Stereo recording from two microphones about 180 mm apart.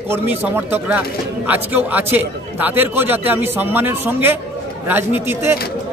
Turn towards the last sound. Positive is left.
turn(degrees=-10)  # may be behind; listen again after turning